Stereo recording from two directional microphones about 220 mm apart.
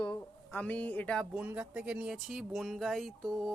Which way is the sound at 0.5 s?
5° left (ahead or behind).